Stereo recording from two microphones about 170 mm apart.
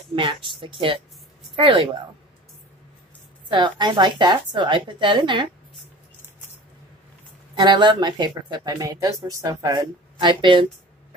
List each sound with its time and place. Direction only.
0.1 s speech: 30° right (ahead or behind)
3.4 s speech: 25° right (ahead or behind)
7.5 s speech: 25° right (ahead or behind)